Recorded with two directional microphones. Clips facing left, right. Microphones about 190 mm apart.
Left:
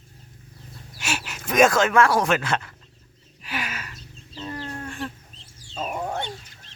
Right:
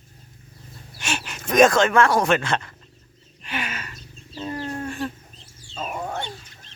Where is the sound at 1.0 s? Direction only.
5° left (ahead or behind).